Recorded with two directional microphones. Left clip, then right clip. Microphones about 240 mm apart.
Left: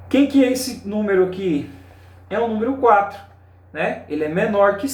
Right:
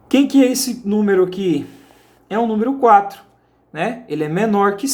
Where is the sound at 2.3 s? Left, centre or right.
Right.